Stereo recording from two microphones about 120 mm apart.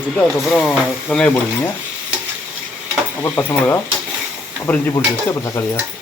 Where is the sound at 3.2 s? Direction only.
20° left (ahead or behind).